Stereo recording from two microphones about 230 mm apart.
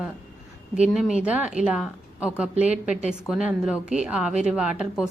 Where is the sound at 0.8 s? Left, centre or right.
Centre.